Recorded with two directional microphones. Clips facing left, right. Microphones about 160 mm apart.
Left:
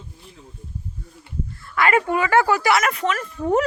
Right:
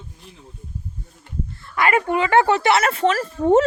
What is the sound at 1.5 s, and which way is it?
Speech, 20° right (ahead or behind).